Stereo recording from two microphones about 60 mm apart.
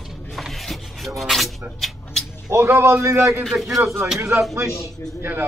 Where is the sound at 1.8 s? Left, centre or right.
Centre.